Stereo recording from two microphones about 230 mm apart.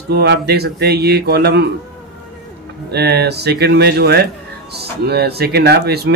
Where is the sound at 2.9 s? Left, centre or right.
Right.